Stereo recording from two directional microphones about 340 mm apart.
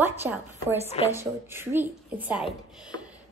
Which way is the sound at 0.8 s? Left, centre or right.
Centre.